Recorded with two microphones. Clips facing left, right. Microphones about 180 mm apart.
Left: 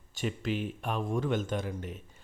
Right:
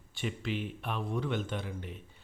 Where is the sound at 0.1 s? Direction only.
40° left (ahead or behind).